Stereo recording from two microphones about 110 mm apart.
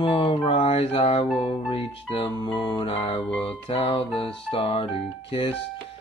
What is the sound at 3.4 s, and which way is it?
Music, 60° left (ahead or behind).